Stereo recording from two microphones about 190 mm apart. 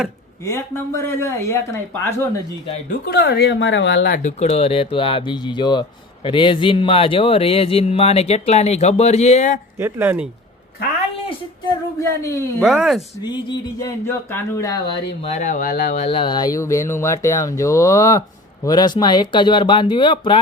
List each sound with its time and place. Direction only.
0.4 s speech: 15° left (ahead or behind)
3.1 s speech: 60° left (ahead or behind)
4.2 s speech: 35° left (ahead or behind)
9.7 s speech: 10° right (ahead or behind)
11.7 s speech: 15° left (ahead or behind)
12.6 s speech: centre (ahead or behind)
13.2 s speech: 20° left (ahead or behind)
15.2 s speech: 40° left (ahead or behind)
16.0 s speech: 25° left (ahead or behind)